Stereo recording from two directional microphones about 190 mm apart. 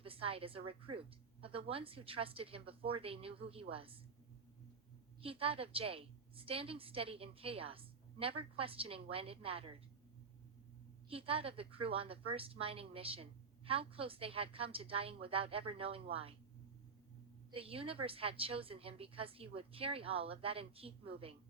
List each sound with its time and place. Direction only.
0.0 s a woman's voice: 30° right (ahead or behind)
5.2 s a woman's voice: 30° right (ahead or behind)
11.1 s a woman's voice: 30° right (ahead or behind)
17.5 s a woman's voice: 30° right (ahead or behind)